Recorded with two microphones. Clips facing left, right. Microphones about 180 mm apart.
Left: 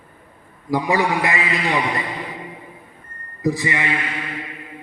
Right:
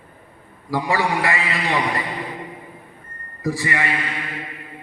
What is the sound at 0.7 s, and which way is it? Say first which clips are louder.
Speech: left 2 dB; 15° left (ahead or behind).